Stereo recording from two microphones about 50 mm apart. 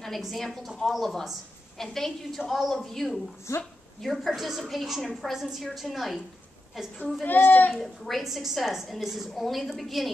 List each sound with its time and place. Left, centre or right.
0.0 s a woman's voice: centre
3.5 s speech: left
4.0 s a woman's voice: centre
7.2 s speech: left
7.7 s a woman's voice: centre